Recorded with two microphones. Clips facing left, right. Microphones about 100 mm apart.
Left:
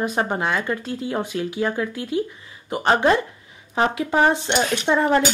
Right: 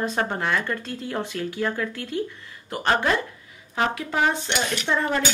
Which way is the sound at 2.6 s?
15° left (ahead or behind).